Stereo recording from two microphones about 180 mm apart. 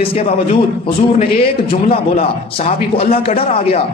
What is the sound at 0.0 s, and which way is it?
Speech, 30° left (ahead or behind).